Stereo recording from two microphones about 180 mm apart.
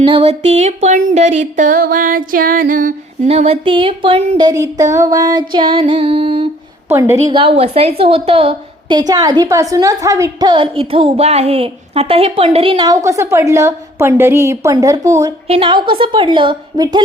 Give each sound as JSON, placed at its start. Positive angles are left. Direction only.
{"t": 0.0, "sound": "a sound", "side_deg": -30}
{"t": 3.2, "sound": "a woman's voice", "side_deg": -35}
{"t": 6.8, "sound": "a woman's voice", "side_deg": -15}
{"t": 15.4, "sound": "a woman's voice", "side_deg": -30}